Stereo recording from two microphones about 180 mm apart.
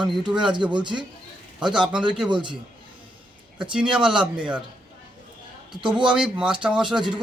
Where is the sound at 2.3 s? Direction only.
25° right (ahead or behind).